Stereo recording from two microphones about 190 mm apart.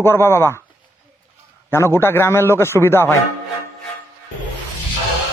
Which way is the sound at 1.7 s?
15° left (ahead or behind).